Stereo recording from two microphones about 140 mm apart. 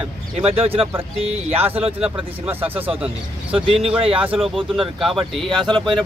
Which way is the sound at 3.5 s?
45° right (ahead or behind).